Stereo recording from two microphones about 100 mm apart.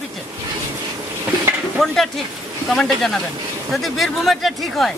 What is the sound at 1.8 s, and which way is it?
Speech, centre (ahead or behind).